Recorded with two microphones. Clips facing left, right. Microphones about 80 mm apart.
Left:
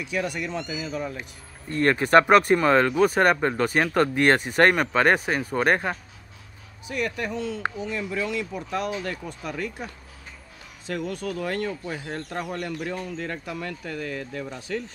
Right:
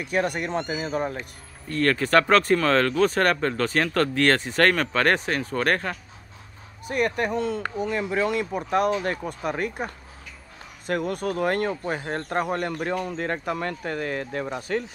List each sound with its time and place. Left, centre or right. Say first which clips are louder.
0.0 s speech: right 3 dB; right
1.7 s speech: left 2 dB; left
6.9 s speech: right 4 dB; right